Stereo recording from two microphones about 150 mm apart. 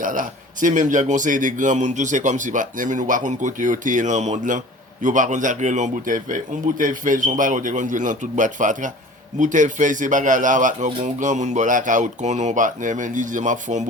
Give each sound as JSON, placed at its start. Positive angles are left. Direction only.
{"t": 0.0, "sound": "a man's voice", "side_deg": -65}